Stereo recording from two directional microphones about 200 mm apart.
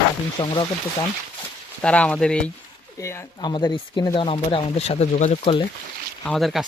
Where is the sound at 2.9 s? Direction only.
15° left (ahead or behind); by 5.6 s 30° left (ahead or behind).